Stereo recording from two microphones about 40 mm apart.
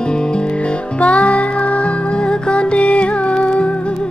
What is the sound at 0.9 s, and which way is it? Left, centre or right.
Music, left.